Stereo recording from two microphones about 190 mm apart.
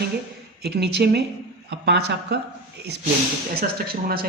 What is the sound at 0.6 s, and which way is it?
Speech, 60° right (ahead or behind).